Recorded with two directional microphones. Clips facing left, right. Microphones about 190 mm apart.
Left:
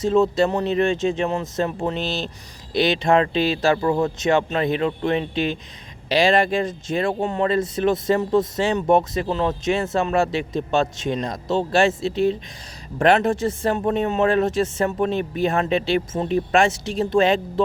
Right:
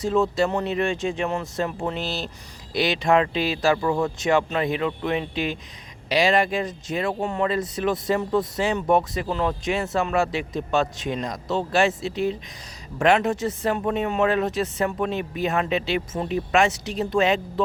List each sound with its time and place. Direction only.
0.0 s speech: 25° left (ahead or behind)